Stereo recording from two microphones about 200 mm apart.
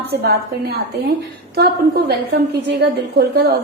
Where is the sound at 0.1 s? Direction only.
55° right (ahead or behind).